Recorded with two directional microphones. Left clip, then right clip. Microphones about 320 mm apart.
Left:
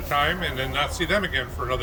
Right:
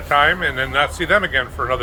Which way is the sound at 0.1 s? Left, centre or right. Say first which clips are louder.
Right 8 dB; centre.